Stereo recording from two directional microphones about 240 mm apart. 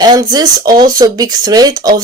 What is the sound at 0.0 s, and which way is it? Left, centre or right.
Speech, centre.